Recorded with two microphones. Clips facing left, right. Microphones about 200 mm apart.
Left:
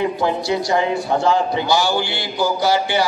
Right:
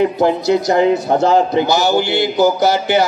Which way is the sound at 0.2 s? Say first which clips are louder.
Right 6 dB; 45° right (ahead or behind).